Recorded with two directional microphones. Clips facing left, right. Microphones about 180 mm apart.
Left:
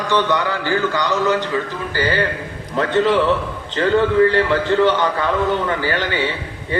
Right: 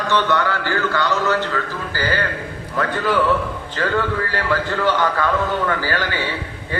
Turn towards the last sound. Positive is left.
turn(degrees=20)  # may be behind; listen again after turning